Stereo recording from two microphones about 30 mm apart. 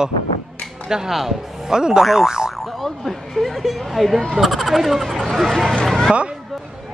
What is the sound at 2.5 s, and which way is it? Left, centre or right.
Speech, centre.